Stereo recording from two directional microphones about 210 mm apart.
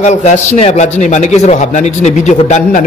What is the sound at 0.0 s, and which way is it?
A man's voice, 35° left (ahead or behind).